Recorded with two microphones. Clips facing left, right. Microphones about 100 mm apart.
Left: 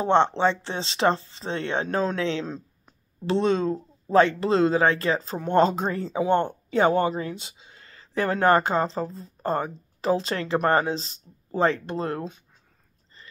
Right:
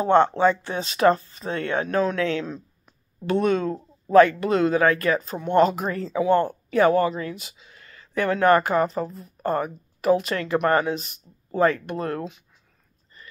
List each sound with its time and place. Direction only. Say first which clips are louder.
0.0 s speech: right 2 dB; 25° left (ahead or behind)